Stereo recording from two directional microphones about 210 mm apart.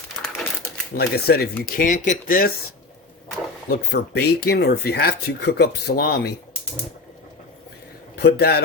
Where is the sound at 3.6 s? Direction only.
50° left (ahead or behind).